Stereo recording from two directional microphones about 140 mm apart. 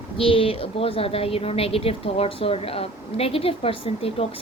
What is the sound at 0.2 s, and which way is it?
A woman's voice, 40° left (ahead or behind).